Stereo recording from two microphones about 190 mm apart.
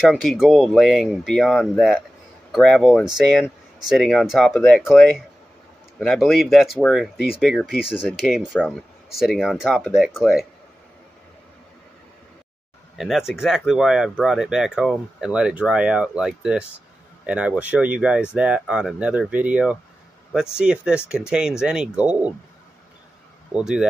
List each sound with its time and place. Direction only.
0.0 s speech: centre (ahead or behind)
12.9 s speech: centre (ahead or behind)
23.5 s speech: 5° right (ahead or behind)